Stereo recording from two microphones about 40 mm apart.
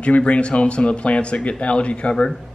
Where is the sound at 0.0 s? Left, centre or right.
Left.